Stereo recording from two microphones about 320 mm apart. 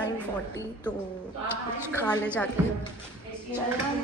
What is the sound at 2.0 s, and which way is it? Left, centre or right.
Speech, centre.